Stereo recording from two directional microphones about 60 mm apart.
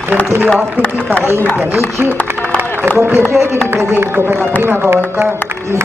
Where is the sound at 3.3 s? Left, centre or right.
Right.